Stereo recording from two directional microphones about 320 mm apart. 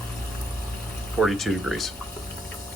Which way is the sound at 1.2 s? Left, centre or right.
Centre.